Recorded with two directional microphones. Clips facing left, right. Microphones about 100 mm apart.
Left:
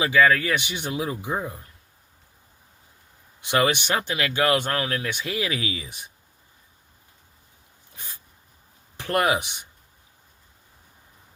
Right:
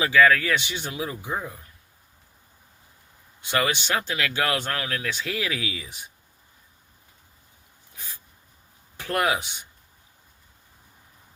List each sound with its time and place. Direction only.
0.0 s speech: 20° left (ahead or behind)
3.4 s speech: 20° left (ahead or behind)
9.0 s speech: 20° left (ahead or behind)